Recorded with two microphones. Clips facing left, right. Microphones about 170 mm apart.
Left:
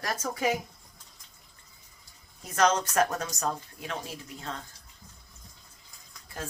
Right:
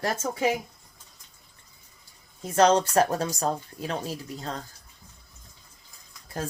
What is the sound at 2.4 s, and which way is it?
Speech, 30° right (ahead or behind).